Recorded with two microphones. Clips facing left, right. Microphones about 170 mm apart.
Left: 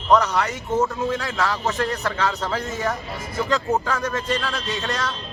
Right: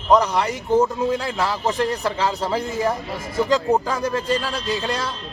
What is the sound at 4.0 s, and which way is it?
Speech, 30° right (ahead or behind).